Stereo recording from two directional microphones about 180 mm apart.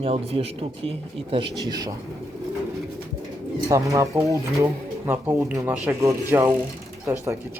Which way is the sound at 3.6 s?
20° right (ahead or behind).